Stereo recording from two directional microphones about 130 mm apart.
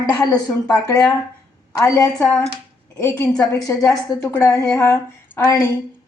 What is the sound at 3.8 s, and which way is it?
Speech, 20° left (ahead or behind).